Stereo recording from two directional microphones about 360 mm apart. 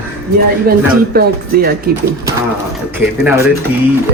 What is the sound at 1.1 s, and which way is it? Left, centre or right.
Speech, right.